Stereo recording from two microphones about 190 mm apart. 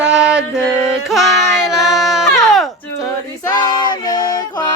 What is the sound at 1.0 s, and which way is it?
Music, centre (ahead or behind).